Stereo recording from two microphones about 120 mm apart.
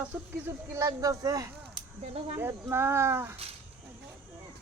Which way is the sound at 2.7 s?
20° right (ahead or behind).